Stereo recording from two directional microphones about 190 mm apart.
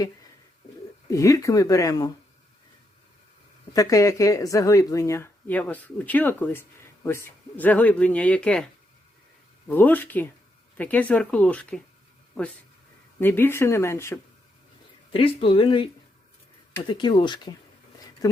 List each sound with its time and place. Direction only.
1.1 s a woman's voice: 15° left (ahead or behind)
3.7 s a woman's voice: 20° left (ahead or behind)
9.6 s a woman's voice: 10° left (ahead or behind)
13.1 s a woman's voice: 10° left (ahead or behind)
15.1 s speech: 30° left (ahead or behind)
16.9 s speech: 25° left (ahead or behind)